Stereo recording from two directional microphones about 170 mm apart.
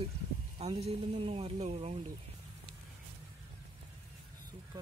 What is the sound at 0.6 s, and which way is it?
Speech, 35° right (ahead or behind).